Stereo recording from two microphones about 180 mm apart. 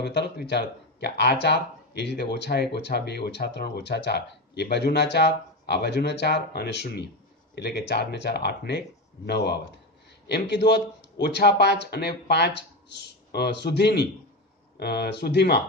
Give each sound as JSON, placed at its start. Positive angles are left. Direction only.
{"t": 0.0, "sound": "speech", "side_deg": 65}